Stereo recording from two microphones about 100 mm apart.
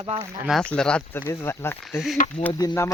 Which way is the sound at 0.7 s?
10° left (ahead or behind).